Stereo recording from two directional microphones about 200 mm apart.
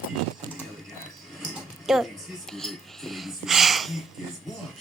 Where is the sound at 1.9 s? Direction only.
Centre (ahead or behind).